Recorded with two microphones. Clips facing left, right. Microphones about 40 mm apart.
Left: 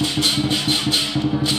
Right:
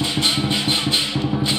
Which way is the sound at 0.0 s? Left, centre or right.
Right.